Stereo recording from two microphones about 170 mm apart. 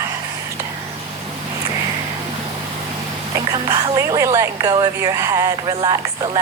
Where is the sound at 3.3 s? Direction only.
20° right (ahead or behind).